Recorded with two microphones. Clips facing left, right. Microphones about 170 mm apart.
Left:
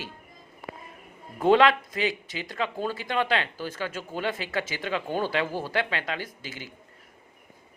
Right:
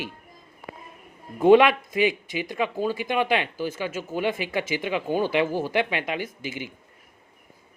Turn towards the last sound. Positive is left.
turn(degrees=-15)  # may be behind; listen again after turning